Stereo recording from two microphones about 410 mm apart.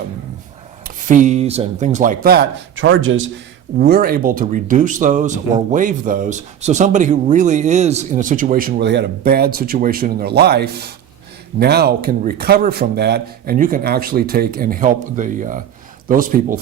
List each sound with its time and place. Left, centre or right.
0.9 s speech: centre